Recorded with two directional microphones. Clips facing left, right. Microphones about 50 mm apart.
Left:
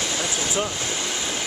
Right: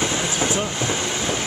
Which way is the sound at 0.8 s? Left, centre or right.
Right.